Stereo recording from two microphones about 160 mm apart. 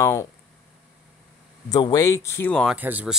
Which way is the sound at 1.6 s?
25° left (ahead or behind).